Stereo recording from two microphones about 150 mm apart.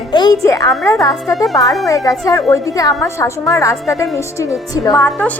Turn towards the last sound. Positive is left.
turn(degrees=10)  # may be behind; listen again after turning